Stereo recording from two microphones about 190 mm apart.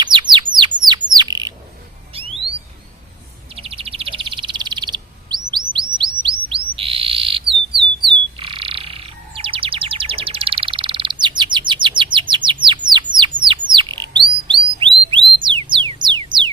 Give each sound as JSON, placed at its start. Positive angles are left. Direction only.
{"t": 0.0, "sound": "bird", "side_deg": -25}
{"t": 2.1, "sound": "a sound", "side_deg": -30}
{"t": 3.5, "sound": "bird", "side_deg": -30}
{"t": 5.7, "sound": "chirp", "side_deg": -25}
{"t": 6.5, "sound": "bird", "side_deg": -30}
{"t": 8.0, "sound": "frog", "side_deg": -25}
{"t": 12.3, "sound": "bird", "side_deg": -25}
{"t": 15.4, "sound": "music", "side_deg": -25}